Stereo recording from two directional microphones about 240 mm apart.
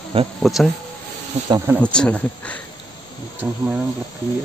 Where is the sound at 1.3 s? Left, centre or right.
Right.